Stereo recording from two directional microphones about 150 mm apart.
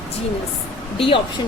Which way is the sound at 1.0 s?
35° left (ahead or behind).